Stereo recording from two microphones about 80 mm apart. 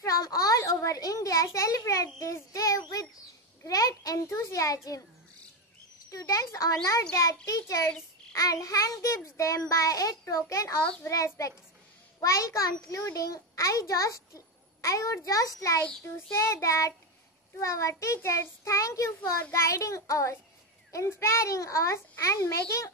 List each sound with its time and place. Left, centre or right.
0.0 s a sound: left
2.1 s a child's voice: left
6.0 s a child's voice: left